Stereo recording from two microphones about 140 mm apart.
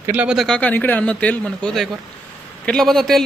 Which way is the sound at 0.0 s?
15° right (ahead or behind).